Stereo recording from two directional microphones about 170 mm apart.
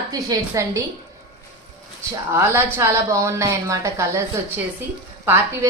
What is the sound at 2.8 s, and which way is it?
A woman's voice, 15° right (ahead or behind).